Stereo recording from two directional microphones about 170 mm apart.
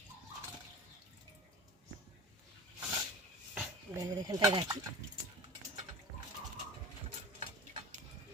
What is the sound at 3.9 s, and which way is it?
Speech, 20° right (ahead or behind).